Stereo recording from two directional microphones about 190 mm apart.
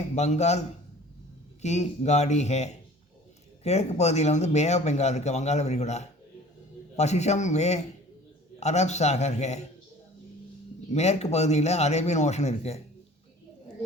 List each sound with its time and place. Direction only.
0.2 s speech: 35° left (ahead or behind)
1.6 s speech: 35° left (ahead or behind)
10.9 s speech: 35° left (ahead or behind)